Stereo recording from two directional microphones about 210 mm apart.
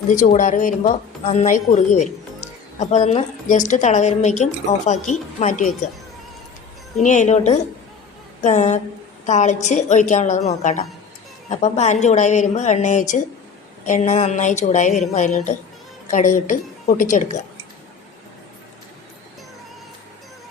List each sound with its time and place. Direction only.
0.1 s a woman's voice: 35° left (ahead or behind)
7.0 s a woman's voice: 35° left (ahead or behind)